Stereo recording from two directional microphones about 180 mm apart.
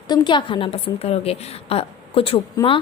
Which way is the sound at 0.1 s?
25° left (ahead or behind).